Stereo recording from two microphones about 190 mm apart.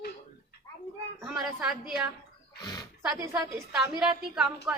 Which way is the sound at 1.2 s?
5° right (ahead or behind).